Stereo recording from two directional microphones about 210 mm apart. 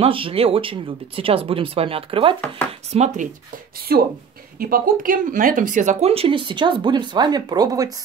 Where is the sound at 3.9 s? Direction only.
45° right (ahead or behind).